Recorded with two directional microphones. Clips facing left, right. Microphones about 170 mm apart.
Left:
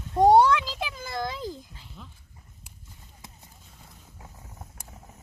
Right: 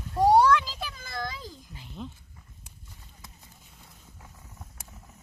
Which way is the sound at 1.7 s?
15° right (ahead or behind).